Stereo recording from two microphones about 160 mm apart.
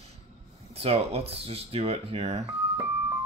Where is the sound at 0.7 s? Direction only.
40° right (ahead or behind).